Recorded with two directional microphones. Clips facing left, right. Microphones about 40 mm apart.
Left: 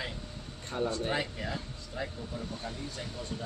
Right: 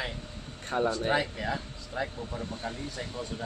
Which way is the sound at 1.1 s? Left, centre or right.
Right.